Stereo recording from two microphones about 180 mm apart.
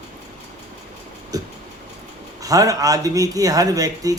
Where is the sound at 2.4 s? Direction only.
20° right (ahead or behind).